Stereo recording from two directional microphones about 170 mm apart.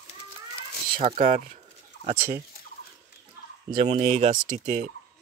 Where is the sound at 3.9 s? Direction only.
40° right (ahead or behind).